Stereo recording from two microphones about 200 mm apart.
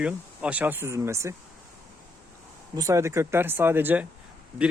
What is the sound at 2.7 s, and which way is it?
Speech, 15° right (ahead or behind).